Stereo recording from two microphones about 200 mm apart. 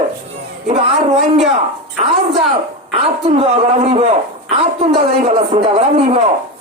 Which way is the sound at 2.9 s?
30° right (ahead or behind).